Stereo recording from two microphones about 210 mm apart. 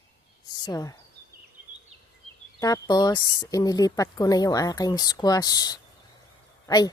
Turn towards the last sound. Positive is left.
turn(degrees=20)  # may be behind; listen again after turning